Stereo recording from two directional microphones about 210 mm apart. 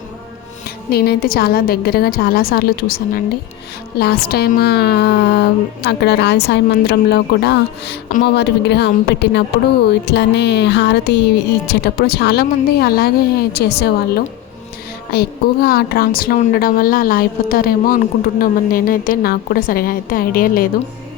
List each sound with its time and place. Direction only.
0.9 s speech: 50° left (ahead or behind)
15.1 s speech: 45° left (ahead or behind)